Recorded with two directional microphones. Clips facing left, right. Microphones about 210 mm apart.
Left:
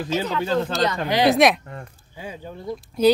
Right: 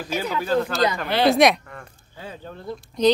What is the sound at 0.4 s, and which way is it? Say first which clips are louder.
Speech: right 3 dB; 25° left (ahead or behind).